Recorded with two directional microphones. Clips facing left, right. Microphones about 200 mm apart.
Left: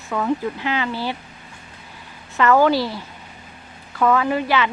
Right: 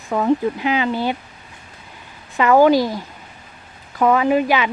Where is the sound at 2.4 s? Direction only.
15° right (ahead or behind).